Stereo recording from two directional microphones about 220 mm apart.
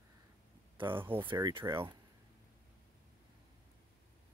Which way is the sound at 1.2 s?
20° right (ahead or behind).